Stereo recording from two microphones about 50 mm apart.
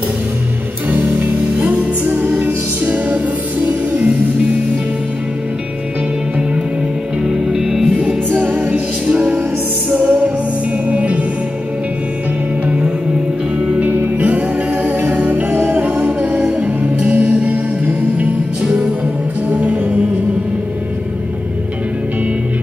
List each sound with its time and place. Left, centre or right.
0.8 s music: right
7.2 s music: centre
8.3 s music: right
12.6 s music: right
13.7 s music: right
15.5 s music: right
15.9 s music: right